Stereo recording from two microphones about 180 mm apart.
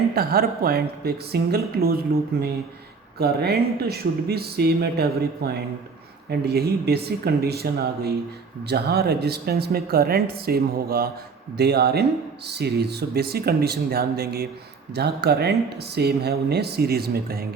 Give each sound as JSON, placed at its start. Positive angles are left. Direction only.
{"t": 0.1, "sound": "a woman's voice", "side_deg": -60}
{"t": 3.2, "sound": "a woman's voice", "side_deg": -60}